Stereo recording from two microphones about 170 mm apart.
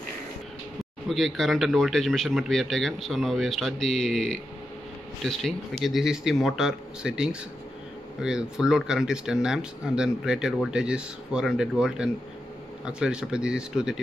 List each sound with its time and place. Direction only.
1.0 s speech: centre (ahead or behind)